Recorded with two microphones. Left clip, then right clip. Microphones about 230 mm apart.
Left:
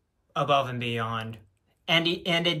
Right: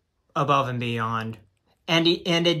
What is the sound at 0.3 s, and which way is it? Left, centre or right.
Speech, centre.